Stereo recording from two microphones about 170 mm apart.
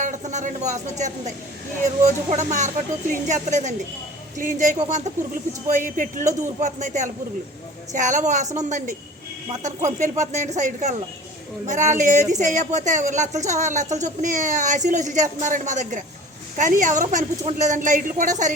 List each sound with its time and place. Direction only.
0.0 s speech: 45° right (ahead or behind)